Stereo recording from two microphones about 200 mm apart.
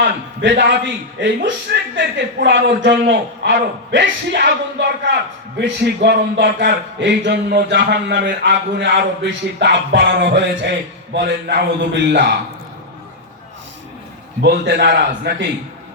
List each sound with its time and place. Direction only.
0.4 s a man's voice: 65° right (ahead or behind)
14.4 s a man's voice: 60° right (ahead or behind)